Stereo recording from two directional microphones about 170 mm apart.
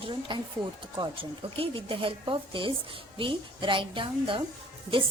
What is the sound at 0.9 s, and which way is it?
A woman's voice, 30° right (ahead or behind).